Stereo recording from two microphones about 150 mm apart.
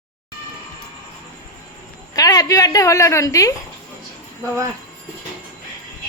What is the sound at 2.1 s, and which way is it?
A woman's voice, 25° left (ahead or behind).